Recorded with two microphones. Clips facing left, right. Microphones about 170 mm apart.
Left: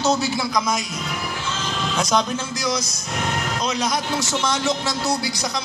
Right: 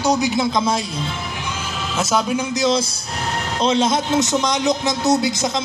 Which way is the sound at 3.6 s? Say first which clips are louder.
Right 9 dB; 25° right (ahead or behind).